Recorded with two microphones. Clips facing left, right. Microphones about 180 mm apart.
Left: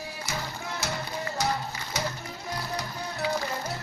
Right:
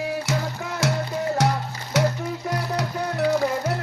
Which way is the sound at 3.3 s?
80° right.